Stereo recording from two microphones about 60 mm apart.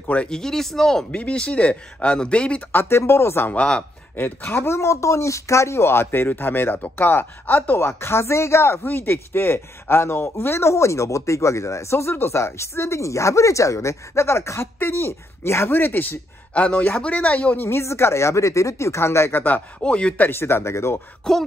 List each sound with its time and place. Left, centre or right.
0.0 s speech: left
0.3 s speech: centre
1.1 s speech: left
2.7 s speech: left
4.1 s speech: left
16.5 s speech: centre
17.6 s speech: left
19.8 s speech: centre
20.2 s speech: left
21.2 s speech: centre